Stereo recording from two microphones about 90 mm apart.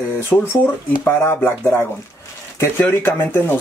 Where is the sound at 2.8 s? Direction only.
25° left (ahead or behind).